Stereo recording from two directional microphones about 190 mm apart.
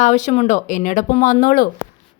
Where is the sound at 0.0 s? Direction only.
40° left (ahead or behind).